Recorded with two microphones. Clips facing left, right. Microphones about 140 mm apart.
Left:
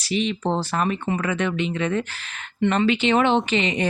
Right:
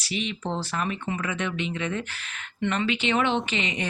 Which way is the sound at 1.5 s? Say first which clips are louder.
Left 5 dB; 40° left (ahead or behind).